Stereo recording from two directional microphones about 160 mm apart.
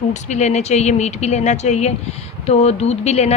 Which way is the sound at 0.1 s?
45° left (ahead or behind).